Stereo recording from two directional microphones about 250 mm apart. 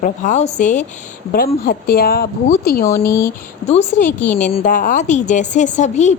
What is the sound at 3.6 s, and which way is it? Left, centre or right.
Speech, left.